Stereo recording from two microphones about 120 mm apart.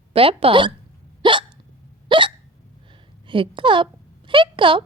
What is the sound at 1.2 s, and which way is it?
Hiccup, 40° right (ahead or behind).